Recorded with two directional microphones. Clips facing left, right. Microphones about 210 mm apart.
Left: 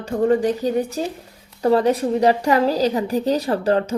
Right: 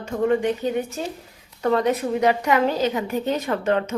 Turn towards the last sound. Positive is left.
turn(degrees=35)  # may be behind; listen again after turning